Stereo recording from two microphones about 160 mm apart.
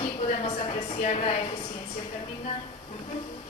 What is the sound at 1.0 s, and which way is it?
Speech, 40° left (ahead or behind).